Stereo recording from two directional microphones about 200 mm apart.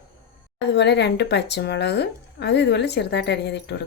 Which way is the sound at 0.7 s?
60° left (ahead or behind).